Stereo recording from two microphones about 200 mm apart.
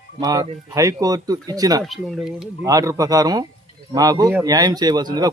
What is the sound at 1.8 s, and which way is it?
Speech, centre (ahead or behind).